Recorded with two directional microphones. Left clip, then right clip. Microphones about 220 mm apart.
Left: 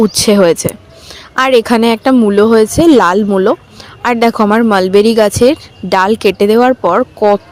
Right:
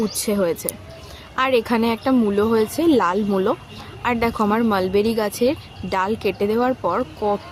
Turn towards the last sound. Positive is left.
turn(degrees=35)  # may be behind; listen again after turning